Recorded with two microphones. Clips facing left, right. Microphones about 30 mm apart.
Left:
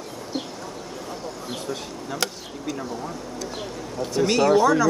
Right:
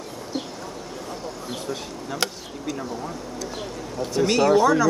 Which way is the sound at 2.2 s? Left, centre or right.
Right.